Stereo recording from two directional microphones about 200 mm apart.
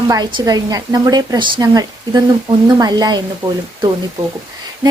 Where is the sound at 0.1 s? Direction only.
20° right (ahead or behind).